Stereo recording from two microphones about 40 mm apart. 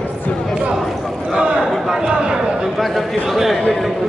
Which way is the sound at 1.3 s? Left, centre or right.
Right.